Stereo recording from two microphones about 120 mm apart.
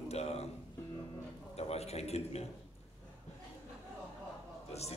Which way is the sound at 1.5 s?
60° left (ahead or behind).